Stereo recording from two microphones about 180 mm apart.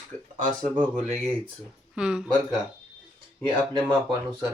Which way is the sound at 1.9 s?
5° right (ahead or behind).